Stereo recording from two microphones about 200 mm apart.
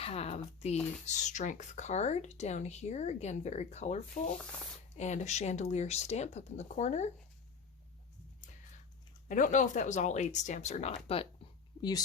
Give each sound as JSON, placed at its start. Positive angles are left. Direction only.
{"t": 0.0, "sound": "speech", "side_deg": 30}
{"t": 9.3, "sound": "speech", "side_deg": 40}